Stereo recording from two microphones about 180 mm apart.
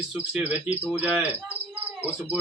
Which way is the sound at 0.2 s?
5° right (ahead or behind).